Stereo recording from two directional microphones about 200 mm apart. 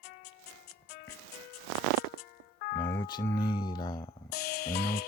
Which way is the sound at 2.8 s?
15° left (ahead or behind).